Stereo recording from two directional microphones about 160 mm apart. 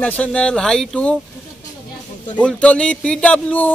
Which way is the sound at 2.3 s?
5° left (ahead or behind).